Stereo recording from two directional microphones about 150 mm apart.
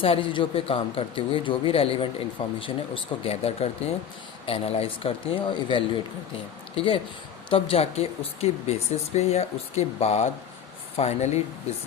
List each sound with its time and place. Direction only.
0.0 s speech: 35° left (ahead or behind)